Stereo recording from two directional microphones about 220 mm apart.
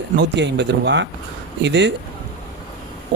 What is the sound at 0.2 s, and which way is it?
Speech, 50° right (ahead or behind).